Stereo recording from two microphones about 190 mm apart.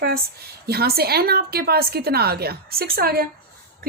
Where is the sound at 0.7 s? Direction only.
55° right (ahead or behind).